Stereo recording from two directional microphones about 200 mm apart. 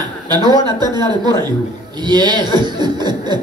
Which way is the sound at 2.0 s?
20° right (ahead or behind).